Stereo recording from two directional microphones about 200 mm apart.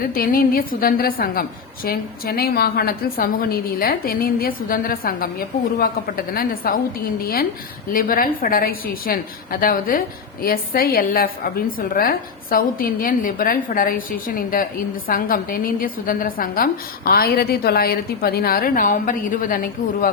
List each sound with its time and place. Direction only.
0.0 s a woman's voice: 45° left (ahead or behind)